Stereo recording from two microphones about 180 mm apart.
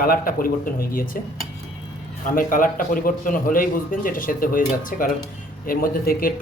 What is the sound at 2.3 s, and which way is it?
Speech, 50° left (ahead or behind).